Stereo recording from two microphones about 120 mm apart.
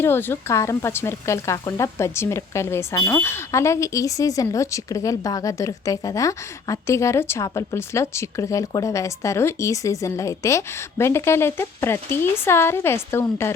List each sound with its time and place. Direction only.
0.0 s speech: 20° left (ahead or behind)